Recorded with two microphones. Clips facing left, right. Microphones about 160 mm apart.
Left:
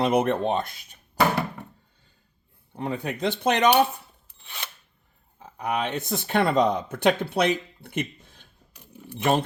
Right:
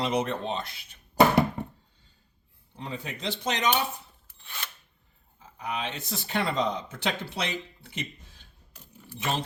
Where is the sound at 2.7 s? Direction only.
55° left (ahead or behind).